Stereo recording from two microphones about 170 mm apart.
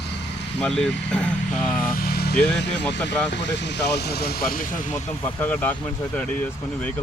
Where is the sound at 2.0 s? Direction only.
65° left (ahead or behind).